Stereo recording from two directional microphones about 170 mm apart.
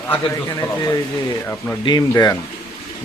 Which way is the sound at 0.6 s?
20° left (ahead or behind).